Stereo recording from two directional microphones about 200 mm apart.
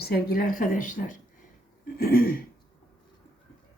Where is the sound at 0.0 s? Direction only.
50° left (ahead or behind).